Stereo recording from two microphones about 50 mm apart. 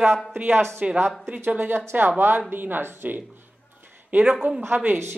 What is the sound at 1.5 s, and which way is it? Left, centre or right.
A woman's voice, right.